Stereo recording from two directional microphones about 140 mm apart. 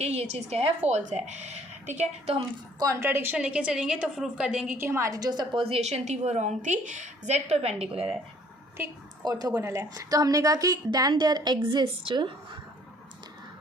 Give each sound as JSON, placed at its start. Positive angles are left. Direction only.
{"t": 0.0, "sound": "a woman's voice", "side_deg": -50}
{"t": 2.7, "sound": "a woman's voice", "side_deg": -20}
{"t": 5.6, "sound": "a woman's voice", "side_deg": -50}
{"t": 9.2, "sound": "a woman's voice", "side_deg": -25}